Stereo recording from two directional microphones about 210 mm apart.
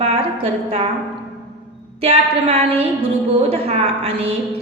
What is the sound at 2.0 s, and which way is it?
A woman's voice, 30° right (ahead or behind).